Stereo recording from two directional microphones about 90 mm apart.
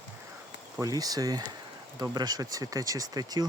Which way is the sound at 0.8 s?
45° right (ahead or behind).